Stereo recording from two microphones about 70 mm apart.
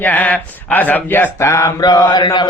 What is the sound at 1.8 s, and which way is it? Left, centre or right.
Mantra, left.